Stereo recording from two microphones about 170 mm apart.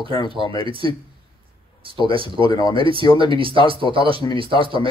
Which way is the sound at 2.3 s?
25° left (ahead or behind).